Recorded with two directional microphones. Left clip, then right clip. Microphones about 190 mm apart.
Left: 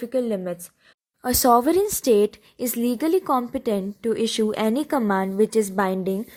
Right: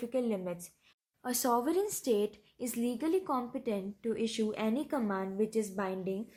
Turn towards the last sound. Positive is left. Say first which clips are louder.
# left 13 dB
turn(degrees=40)  # may be behind; listen again after turning